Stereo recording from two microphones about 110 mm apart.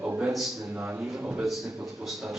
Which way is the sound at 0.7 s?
15° right (ahead or behind).